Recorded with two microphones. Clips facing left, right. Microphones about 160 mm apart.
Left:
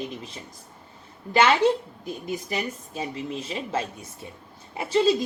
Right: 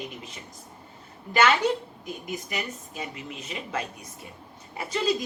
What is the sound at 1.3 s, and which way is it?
Speech, 30° left (ahead or behind).